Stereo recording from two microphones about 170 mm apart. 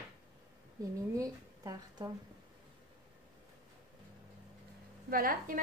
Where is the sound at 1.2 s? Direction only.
20° right (ahead or behind).